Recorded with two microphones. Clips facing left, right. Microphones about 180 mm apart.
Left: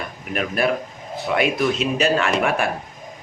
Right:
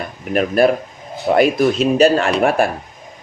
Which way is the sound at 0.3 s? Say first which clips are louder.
Right 7 dB; 40° right (ahead or behind).